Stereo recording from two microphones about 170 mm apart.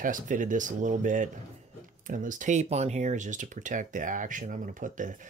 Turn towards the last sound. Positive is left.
turn(degrees=-50)  # may be behind; listen again after turning